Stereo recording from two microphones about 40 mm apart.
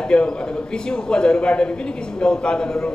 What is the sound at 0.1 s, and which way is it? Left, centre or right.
A man's voice, left.